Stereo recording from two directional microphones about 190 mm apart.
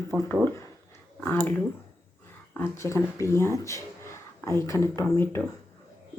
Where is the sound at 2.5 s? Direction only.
15° left (ahead or behind).